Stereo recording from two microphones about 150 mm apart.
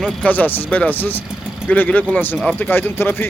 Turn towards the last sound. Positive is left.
turn(degrees=15)  # may be behind; listen again after turning